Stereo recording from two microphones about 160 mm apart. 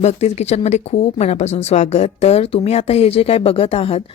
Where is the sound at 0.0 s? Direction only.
45° left (ahead or behind).